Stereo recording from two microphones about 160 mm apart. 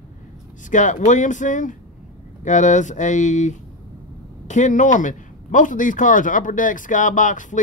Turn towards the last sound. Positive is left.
turn(degrees=55)  # may be behind; listen again after turning